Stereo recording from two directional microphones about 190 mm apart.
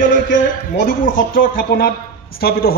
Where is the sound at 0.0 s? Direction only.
45° left (ahead or behind).